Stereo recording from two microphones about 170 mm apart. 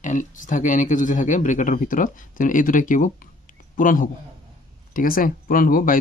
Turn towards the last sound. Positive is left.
turn(degrees=55)  # may be behind; listen again after turning